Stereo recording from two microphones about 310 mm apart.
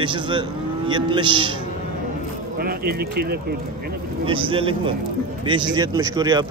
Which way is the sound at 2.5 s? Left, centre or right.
Right.